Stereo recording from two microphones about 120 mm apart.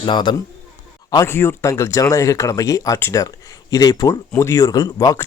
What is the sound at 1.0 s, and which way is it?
Speech, 25° left (ahead or behind).